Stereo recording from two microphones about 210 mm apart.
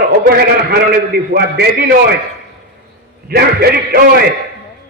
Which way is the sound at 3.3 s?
50° right (ahead or behind).